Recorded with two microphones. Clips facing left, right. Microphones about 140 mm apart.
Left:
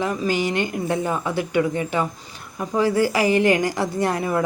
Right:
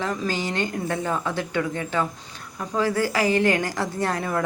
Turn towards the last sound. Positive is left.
turn(degrees=10)  # may be behind; listen again after turning